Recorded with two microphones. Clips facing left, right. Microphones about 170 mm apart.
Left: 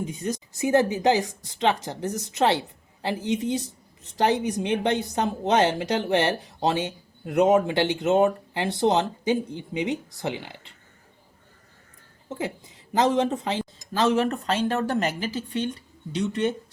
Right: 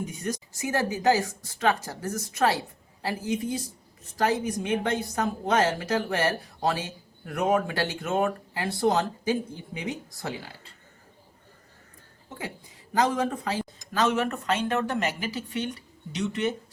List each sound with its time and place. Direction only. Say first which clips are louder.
0.0 s speech: left 3 dB; 25° left (ahead or behind)
12.9 s speech: left 3 dB; 25° left (ahead or behind)